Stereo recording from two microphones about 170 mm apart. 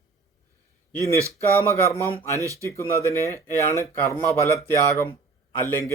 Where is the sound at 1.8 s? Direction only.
15° left (ahead or behind).